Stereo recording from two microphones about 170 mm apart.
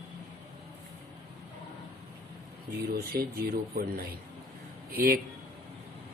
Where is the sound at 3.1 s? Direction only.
65° right (ahead or behind).